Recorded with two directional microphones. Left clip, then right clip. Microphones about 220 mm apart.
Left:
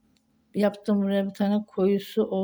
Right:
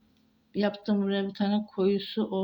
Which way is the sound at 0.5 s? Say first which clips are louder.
Left 4 dB; 40° left (ahead or behind).